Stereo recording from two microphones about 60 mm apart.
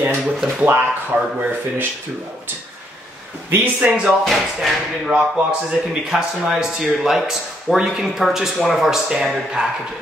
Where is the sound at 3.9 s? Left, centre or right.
Centre.